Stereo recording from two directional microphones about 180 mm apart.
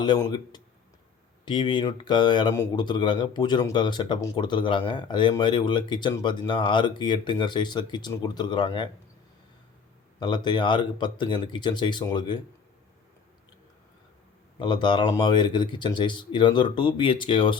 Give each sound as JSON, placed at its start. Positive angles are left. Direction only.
{"t": 0.0, "sound": "speech", "side_deg": 25}
{"t": 10.2, "sound": "speech", "side_deg": 25}
{"t": 14.6, "sound": "speech", "side_deg": 25}